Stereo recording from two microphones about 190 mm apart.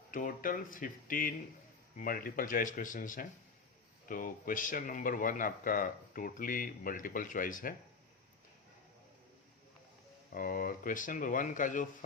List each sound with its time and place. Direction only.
0.1 s speech: 45° left (ahead or behind)
10.3 s speech: 45° left (ahead or behind)